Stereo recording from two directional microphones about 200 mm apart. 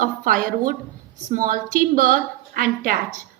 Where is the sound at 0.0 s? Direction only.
45° right (ahead or behind).